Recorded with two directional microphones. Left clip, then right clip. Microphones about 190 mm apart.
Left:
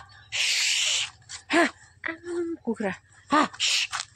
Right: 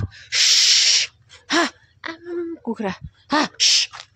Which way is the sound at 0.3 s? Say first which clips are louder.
Right 9 dB; 20° right (ahead or behind).